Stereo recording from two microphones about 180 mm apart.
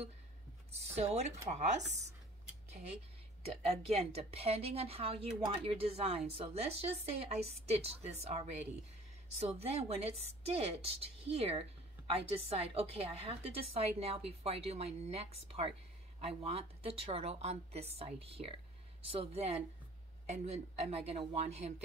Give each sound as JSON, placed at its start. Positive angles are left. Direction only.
{"t": 0.7, "sound": "a woman's voice", "side_deg": -35}
{"t": 3.4, "sound": "a woman's voice", "side_deg": -35}
{"t": 9.6, "sound": "a woman's voice", "side_deg": -35}